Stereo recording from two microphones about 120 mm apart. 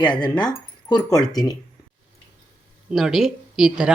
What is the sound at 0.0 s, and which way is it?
Speech, 40° left (ahead or behind).